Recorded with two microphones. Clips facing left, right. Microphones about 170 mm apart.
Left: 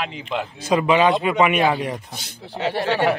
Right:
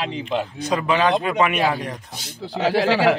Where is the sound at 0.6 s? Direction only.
10° left (ahead or behind).